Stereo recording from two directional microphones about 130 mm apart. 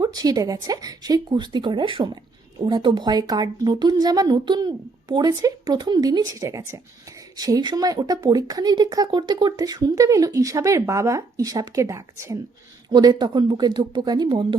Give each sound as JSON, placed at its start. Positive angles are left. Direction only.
{"t": 0.0, "sound": "a woman's voice", "side_deg": -30}
{"t": 12.9, "sound": "a woman's voice", "side_deg": -35}